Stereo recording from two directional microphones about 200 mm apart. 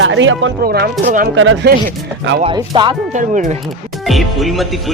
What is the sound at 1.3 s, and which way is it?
Speech, 75° right (ahead or behind).